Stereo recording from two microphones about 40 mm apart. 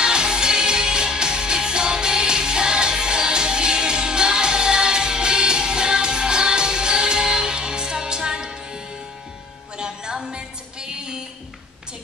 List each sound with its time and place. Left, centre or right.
0.0 s music: centre